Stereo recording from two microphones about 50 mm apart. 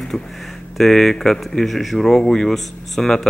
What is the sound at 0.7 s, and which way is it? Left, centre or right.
Speech, centre.